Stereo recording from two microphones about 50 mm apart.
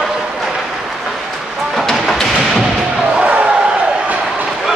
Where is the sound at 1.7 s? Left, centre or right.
Centre.